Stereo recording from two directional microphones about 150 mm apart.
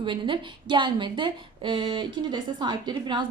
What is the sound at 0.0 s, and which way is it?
A woman's voice, 35° right (ahead or behind).